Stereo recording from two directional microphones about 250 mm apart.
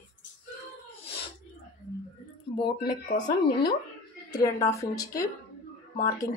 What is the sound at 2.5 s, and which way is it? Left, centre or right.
A woman's voice, centre.